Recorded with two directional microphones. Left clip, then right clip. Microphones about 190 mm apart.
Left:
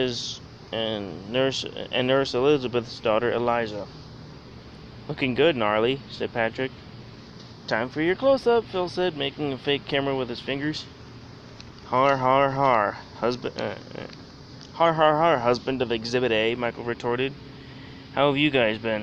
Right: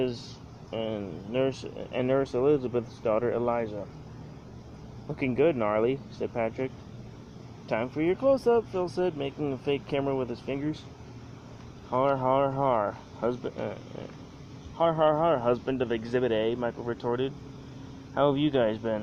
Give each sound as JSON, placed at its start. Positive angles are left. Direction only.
{"t": 0.0, "sound": "speech", "side_deg": 0}
{"t": 5.1, "sound": "speech", "side_deg": 5}
{"t": 7.7, "sound": "speech", "side_deg": 5}
{"t": 11.9, "sound": "speech", "side_deg": 5}
{"t": 14.8, "sound": "speech", "side_deg": 5}
{"t": 16.7, "sound": "speech", "side_deg": 20}
{"t": 17.0, "sound": "speech", "side_deg": 30}